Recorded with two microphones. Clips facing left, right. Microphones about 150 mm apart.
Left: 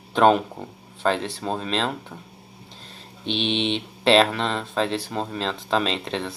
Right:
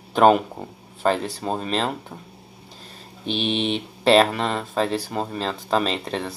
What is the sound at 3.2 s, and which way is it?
Speech, 5° right (ahead or behind).